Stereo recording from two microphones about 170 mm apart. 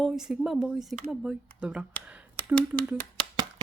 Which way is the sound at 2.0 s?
10° right (ahead or behind).